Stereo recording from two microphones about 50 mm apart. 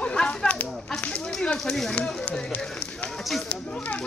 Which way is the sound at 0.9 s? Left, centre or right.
Left.